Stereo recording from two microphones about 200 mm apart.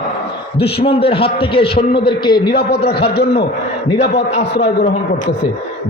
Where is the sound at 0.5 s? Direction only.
55° left (ahead or behind).